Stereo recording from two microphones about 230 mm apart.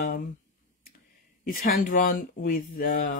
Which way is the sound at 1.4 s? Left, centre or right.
Left.